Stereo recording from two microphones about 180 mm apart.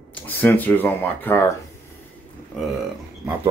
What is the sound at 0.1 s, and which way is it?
Speech, 10° left (ahead or behind).